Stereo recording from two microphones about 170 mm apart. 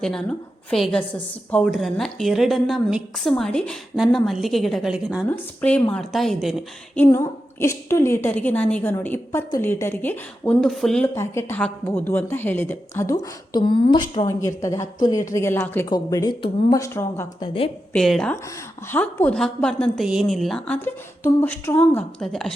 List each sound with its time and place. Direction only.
0.0 s a woman's voice: centre (ahead or behind)
5.3 s a woman's voice: 10° left (ahead or behind)
6.9 s a woman's voice: 15° left (ahead or behind)
11.0 s a woman's voice: 15° left (ahead or behind)
13.5 s a woman's voice: 25° left (ahead or behind)
17.4 s a woman's voice: 30° left (ahead or behind)
17.9 s a woman's voice: centre (ahead or behind)